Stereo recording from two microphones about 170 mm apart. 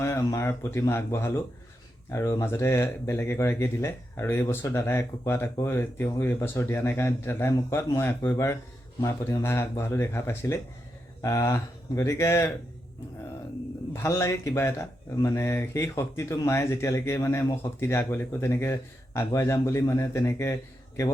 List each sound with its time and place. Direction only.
0.0 s speech: 15° left (ahead or behind)
13.9 s speech: 15° left (ahead or behind)